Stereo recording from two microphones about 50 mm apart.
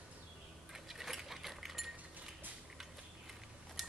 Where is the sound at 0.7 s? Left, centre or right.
Centre.